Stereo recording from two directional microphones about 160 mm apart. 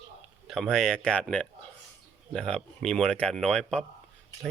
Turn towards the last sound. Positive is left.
turn(degrees=5)  # may be behind; listen again after turning